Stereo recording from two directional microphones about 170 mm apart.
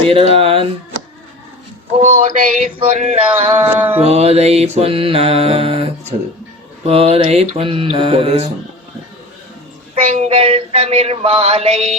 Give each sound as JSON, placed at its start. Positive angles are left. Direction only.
{"t": 0.1, "sound": "mantra", "side_deg": -35}
{"t": 2.0, "sound": "a sound", "side_deg": -50}
{"t": 2.7, "sound": "mantra", "side_deg": -40}
{"t": 9.9, "sound": "mantra", "side_deg": -35}